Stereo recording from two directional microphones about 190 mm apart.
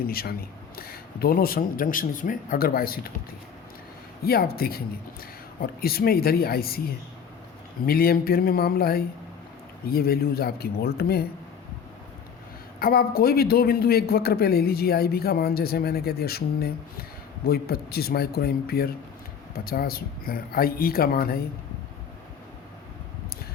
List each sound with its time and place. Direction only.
0.1 s speech: 50° left (ahead or behind)
4.2 s speech: 55° left (ahead or behind)
7.9 s a man's voice: 50° left (ahead or behind)
12.8 s a man's voice: 50° left (ahead or behind)